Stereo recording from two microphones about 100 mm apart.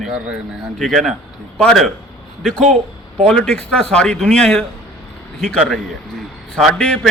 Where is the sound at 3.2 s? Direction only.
5° left (ahead or behind).